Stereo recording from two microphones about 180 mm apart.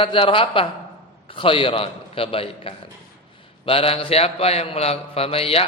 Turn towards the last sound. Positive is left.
turn(degrees=35)  # may be behind; listen again after turning